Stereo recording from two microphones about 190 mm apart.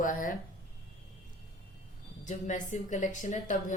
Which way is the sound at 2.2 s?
40° left (ahead or behind).